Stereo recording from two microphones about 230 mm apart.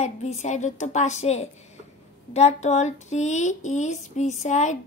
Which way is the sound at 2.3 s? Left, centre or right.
Left.